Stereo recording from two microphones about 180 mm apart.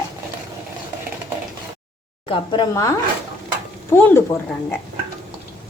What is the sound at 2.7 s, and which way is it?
A woman's voice, 20° left (ahead or behind).